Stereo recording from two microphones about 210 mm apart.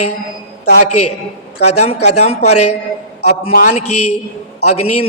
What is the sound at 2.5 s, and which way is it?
Speech, 90° left.